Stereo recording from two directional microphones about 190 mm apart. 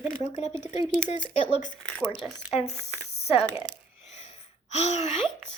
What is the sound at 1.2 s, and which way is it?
Speech, 25° left (ahead or behind).